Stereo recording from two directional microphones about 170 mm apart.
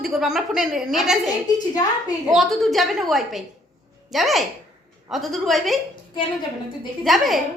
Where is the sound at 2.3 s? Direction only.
Centre (ahead or behind).